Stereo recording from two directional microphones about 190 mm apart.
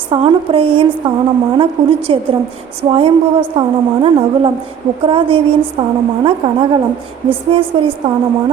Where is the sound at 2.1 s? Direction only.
25° right (ahead or behind).